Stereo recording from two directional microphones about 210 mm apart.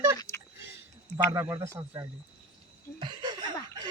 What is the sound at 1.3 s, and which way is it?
Speech, 15° right (ahead or behind).